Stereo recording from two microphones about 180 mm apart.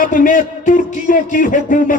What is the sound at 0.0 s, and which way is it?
Speech, 45° left (ahead or behind).